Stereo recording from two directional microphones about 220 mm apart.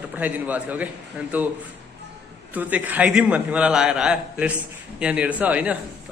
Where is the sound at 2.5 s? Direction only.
5° right (ahead or behind).